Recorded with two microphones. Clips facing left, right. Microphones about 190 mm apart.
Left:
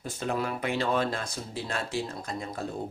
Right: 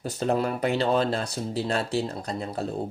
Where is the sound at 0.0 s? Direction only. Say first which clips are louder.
Right 6 dB; 35° right (ahead or behind).